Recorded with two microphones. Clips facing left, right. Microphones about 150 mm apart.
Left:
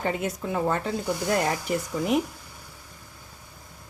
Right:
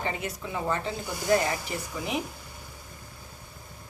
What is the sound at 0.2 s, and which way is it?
Speech, 55° left (ahead or behind).